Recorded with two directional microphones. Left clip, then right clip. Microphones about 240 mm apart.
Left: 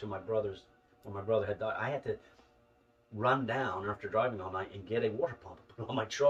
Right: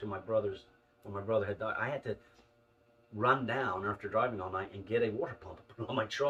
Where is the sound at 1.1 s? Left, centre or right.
Centre.